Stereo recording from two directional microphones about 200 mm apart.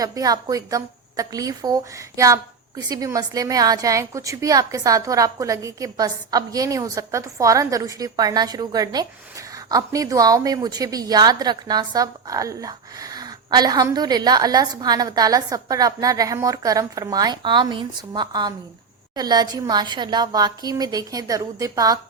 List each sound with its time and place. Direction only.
0.0 s a woman's voice: 20° right (ahead or behind)